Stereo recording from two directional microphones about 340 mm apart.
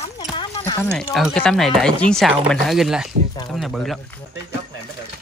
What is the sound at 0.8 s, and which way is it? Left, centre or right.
Speech, centre.